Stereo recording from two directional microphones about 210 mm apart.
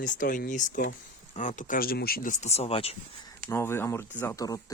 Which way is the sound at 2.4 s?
30° left (ahead or behind).